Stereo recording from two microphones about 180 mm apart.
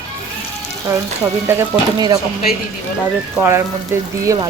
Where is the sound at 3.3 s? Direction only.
15° right (ahead or behind).